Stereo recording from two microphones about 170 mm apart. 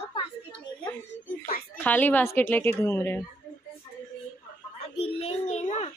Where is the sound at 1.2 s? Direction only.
55° left (ahead or behind).